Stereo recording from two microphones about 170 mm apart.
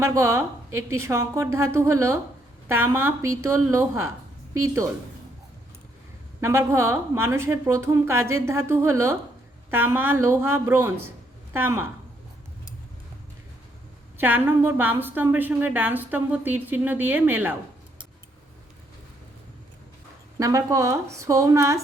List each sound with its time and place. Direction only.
0.0 s a woman's voice: 15° right (ahead or behind)
6.4 s a woman's voice: 15° right (ahead or behind)
14.2 s a woman's voice: 10° right (ahead or behind)
20.4 s a woman's voice: 20° right (ahead or behind)